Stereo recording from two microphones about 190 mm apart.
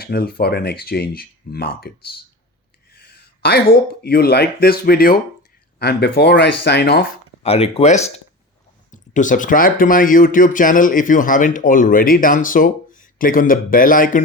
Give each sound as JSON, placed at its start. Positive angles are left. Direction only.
{"t": 0.0, "sound": "speech", "side_deg": 55}
{"t": 3.0, "sound": "speech", "side_deg": 55}
{"t": 7.4, "sound": "speech", "side_deg": 30}